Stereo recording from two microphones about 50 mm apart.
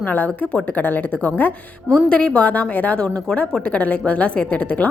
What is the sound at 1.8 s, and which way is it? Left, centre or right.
A woman's voice, centre.